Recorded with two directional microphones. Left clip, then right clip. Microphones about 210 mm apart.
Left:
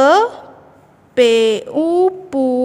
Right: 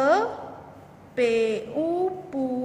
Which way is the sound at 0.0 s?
50° left (ahead or behind).